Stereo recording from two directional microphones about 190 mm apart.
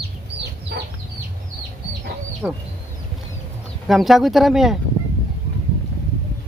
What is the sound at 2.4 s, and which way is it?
Speech, 5° right (ahead or behind).